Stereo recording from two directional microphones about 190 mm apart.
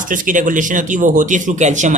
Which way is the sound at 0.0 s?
45° right (ahead or behind).